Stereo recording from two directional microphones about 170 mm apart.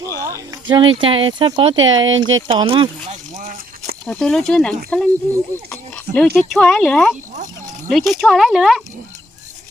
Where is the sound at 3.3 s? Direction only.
45° right (ahead or behind).